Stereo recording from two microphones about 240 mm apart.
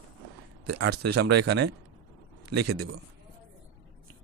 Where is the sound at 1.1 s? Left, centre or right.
Right.